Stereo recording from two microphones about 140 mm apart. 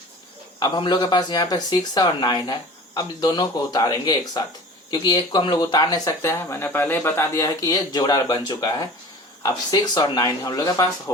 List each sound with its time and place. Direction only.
0.6 s speech: 30° left (ahead or behind)